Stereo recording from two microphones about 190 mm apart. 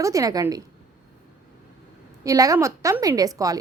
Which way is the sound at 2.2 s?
15° right (ahead or behind).